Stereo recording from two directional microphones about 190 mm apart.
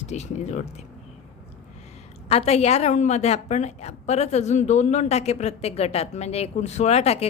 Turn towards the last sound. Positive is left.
turn(degrees=35)  # may be behind; listen again after turning